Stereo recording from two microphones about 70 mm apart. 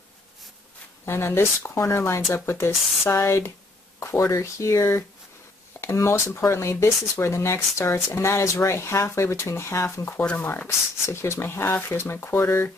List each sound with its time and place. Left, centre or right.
1.0 s speech: left
10.1 s speech: left
11.1 s speech: left